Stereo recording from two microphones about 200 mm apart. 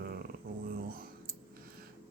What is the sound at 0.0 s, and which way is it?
Dog, 50° right (ahead or behind).